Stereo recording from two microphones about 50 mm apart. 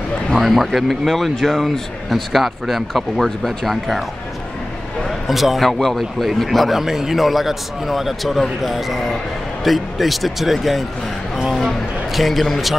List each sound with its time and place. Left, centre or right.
0.4 s speech: centre
5.3 s speech: centre